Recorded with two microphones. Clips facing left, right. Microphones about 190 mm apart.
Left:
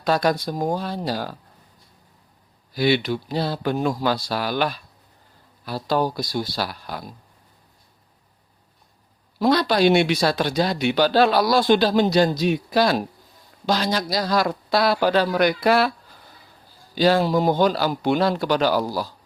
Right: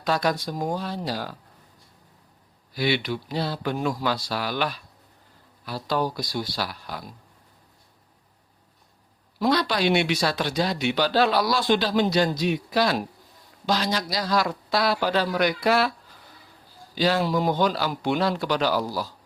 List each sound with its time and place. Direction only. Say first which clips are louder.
0.0 s speech: left 4 dB; 40° left (ahead or behind)
0.4 s a man's voice: left 4 dB; 35° left (ahead or behind)
2.7 s a man's voice: left 5 dB; 35° left (ahead or behind)
9.5 s a man's voice: left 5 dB; 45° left (ahead or behind)
10.5 s a man's voice: left 3 dB; 55° left (ahead or behind); by 13.1 s 35° left (ahead or behind)
13.7 s speech: left 3 dB; 50° left (ahead or behind)
16.9 s a man's voice: left 5 dB; 40° left (ahead or behind)